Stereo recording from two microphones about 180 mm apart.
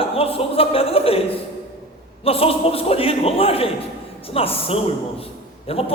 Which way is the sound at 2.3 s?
30° left (ahead or behind).